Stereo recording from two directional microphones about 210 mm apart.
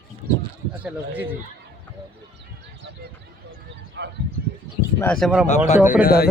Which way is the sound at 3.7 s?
55° right (ahead or behind).